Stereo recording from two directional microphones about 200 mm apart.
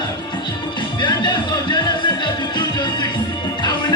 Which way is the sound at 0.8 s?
20° left (ahead or behind).